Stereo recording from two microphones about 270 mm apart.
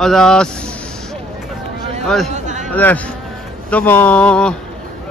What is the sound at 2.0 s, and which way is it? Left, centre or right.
Speech, centre.